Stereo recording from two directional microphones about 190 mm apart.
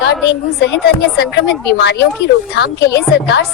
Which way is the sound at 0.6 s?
60° left (ahead or behind).